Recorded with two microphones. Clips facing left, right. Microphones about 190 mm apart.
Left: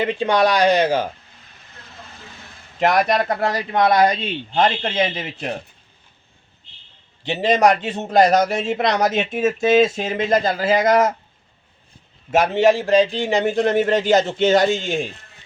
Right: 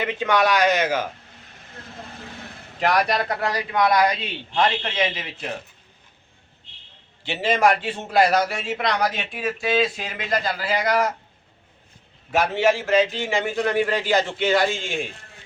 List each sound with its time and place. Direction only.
0.0 s a man's voice: 30° left (ahead or behind)
2.8 s speech: 45° left (ahead or behind)
3.5 s speech: 25° left (ahead or behind)
4.5 s a man's voice: 40° left (ahead or behind)
7.3 s a man's voice: 40° left (ahead or behind)
12.3 s a man's voice: 40° left (ahead or behind)